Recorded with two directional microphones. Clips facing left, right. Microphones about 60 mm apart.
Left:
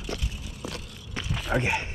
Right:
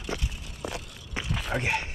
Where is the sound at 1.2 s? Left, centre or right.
Centre.